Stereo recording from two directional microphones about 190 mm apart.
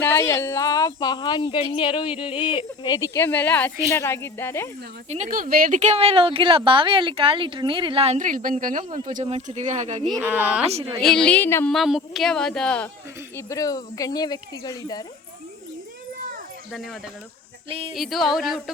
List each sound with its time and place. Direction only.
0.0 s speech: 10° left (ahead or behind)
5.0 s speech: 40° right (ahead or behind)
10.2 s a woman's voice: 10° right (ahead or behind)
11.0 s speech: 5° left (ahead or behind)
11.7 s speech: centre (ahead or behind)
13.3 s speech: 15° left (ahead or behind)
16.7 s speech: centre (ahead or behind)
17.7 s speech: 30° right (ahead or behind)
17.9 s speech: centre (ahead or behind)